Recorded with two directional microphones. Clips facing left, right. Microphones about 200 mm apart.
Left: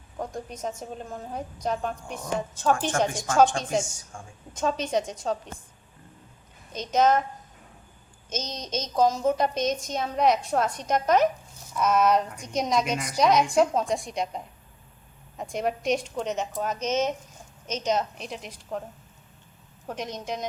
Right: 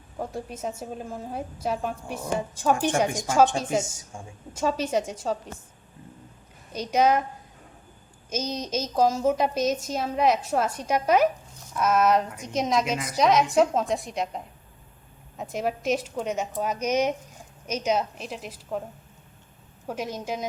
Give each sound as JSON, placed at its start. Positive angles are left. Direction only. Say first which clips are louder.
{"t": 0.2, "sound": "a woman's voice", "louder": "right 1 dB", "side_deg": -5}
{"t": 4.1, "sound": "a woman's voice", "louder": "right 2 dB", "side_deg": -20}
{"t": 4.5, "sound": "a woman's voice", "louder": "right 1 dB", "side_deg": -5}
{"t": 6.7, "sound": "a woman's voice", "louder": "even", "side_deg": -10}
{"t": 8.3, "sound": "a woman's voice", "louder": "right 3 dB", "side_deg": -10}
{"t": 19.9, "sound": "a woman's voice", "louder": "right 2 dB", "side_deg": -5}